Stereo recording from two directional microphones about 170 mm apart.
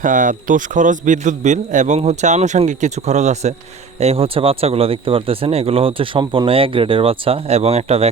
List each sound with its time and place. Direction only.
0.0 s a man's voice: 50° right (ahead or behind)